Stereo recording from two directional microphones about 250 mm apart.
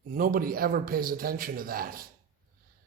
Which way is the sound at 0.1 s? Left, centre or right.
Right.